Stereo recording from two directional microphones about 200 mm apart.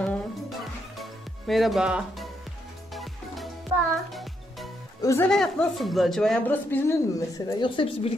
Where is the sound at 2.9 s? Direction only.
Centre (ahead or behind).